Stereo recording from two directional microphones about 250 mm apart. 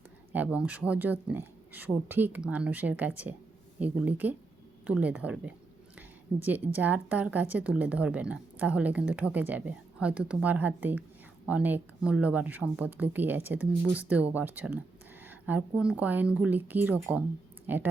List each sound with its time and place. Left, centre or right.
0.3 s speech: centre